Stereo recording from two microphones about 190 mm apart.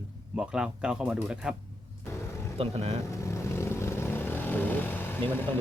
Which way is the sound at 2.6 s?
30° right (ahead or behind).